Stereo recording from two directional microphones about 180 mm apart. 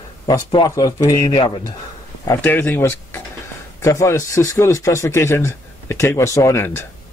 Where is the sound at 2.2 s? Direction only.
10° left (ahead or behind).